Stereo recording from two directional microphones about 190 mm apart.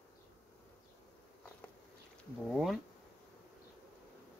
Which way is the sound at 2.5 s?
Centre (ahead or behind).